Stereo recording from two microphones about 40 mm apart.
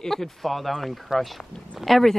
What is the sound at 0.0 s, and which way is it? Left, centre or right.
Speech, centre.